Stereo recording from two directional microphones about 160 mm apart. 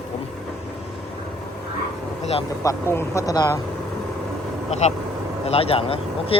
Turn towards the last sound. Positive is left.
turn(degrees=35)  # may be behind; listen again after turning